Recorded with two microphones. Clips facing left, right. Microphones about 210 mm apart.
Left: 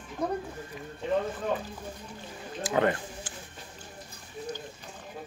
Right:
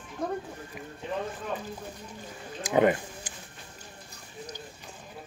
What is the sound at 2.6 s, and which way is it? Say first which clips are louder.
Speech: right 3 dB; 15° right (ahead or behind).